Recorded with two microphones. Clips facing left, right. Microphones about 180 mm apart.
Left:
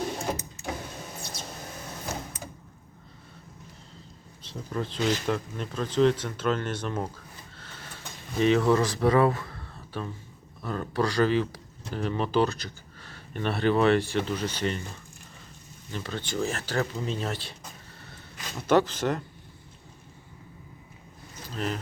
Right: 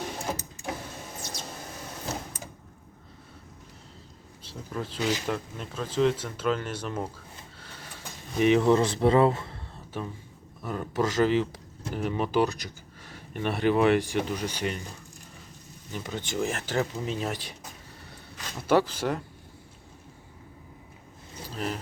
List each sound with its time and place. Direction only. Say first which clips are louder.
4.4 s speech: left 2 dB; 5° right (ahead or behind)
8.4 s speech: right 1 dB; 20° right (ahead or behind)
15.9 s speech: even; 15° right (ahead or behind)
18.7 s speech: left 1 dB; 10° right (ahead or behind)
21.4 s vehicle: left 1 dB; 5° right (ahead or behind)